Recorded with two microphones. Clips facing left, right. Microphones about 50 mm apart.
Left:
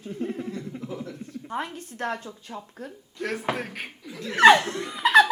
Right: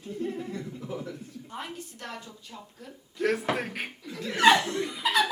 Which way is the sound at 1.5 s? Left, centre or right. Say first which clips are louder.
Left 7 dB; left.